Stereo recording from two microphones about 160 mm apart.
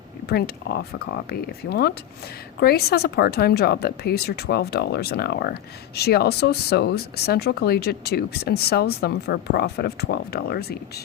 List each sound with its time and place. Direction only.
0.3 s a woman's voice: 75° left (ahead or behind)